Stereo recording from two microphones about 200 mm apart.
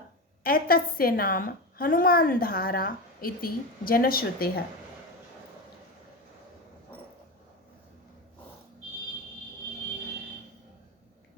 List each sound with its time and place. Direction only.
0.4 s a woman's voice: 50° left (ahead or behind)